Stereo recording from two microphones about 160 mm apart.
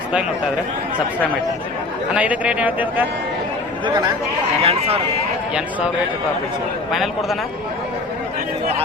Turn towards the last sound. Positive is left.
turn(degrees=0)  # may be behind; listen again after turning